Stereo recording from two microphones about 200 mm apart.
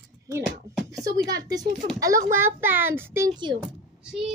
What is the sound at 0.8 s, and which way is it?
Speech, 15° right (ahead or behind).